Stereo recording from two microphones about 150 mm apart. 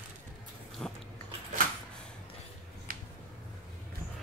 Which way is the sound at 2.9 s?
75° right (ahead or behind).